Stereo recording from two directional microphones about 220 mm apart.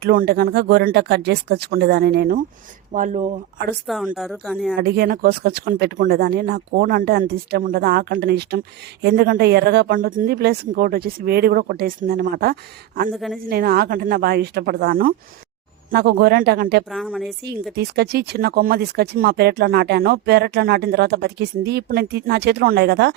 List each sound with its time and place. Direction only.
0.0 s speech: 40° right (ahead or behind)
2.9 s speech: 35° right (ahead or behind)
3.8 s speech: 5° right (ahead or behind)
4.8 s speech: 45° right (ahead or behind)
13.1 s speech: centre (ahead or behind)
13.5 s speech: 45° right (ahead or behind)
16.9 s speech: centre (ahead or behind)
17.7 s speech: 45° right (ahead or behind)